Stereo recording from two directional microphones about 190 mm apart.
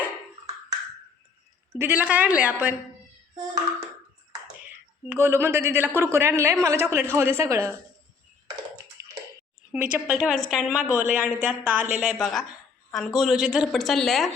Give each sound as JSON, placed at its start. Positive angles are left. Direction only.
{"t": 1.8, "sound": "a man's voice", "side_deg": -10}
{"t": 5.0, "sound": "a man's voice", "side_deg": -10}
{"t": 9.0, "sound": "bathtub", "side_deg": -15}
{"t": 9.7, "sound": "a woman's voice", "side_deg": -5}